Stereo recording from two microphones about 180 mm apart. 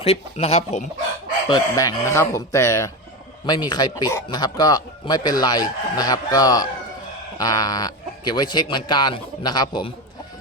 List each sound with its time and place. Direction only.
0.0 s speech: 35° left (ahead or behind)
1.5 s speech: 20° left (ahead or behind)